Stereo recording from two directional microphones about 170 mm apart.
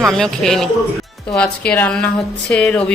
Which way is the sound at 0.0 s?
Centre (ahead or behind).